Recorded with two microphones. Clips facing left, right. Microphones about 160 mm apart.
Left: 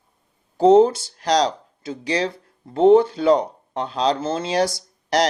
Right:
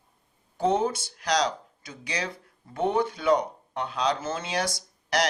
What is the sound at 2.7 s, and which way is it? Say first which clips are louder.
Speech: left 12 dB; 25° left (ahead or behind).